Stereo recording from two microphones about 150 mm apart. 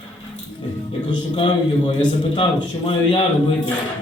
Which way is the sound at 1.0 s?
30° left (ahead or behind).